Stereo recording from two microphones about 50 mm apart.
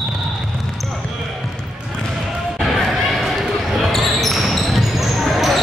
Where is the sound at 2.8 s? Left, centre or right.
Centre.